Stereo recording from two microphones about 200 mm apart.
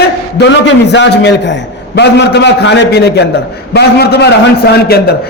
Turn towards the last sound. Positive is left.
turn(degrees=55)  # may be behind; listen again after turning